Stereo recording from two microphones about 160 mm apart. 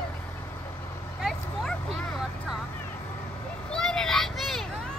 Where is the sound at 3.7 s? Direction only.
5° left (ahead or behind).